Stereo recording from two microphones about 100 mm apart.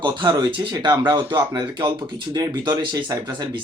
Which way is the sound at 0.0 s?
50° right (ahead or behind).